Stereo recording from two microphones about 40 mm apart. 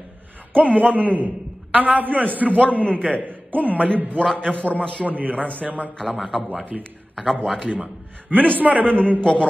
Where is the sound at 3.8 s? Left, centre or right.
Left.